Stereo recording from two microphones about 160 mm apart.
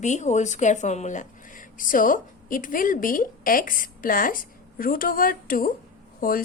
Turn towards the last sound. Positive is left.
turn(degrees=65)  # may be behind; listen again after turning